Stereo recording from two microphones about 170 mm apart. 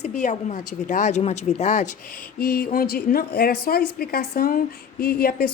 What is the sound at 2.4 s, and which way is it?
A woman's voice, 60° left (ahead or behind).